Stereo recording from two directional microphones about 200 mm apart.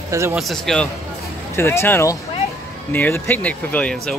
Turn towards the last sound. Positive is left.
turn(degrees=5)  # may be behind; listen again after turning